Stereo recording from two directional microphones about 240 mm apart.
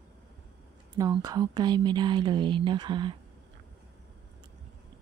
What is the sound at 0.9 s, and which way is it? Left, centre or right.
Speech, centre.